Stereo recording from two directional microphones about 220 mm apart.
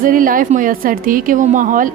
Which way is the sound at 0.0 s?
40° right (ahead or behind).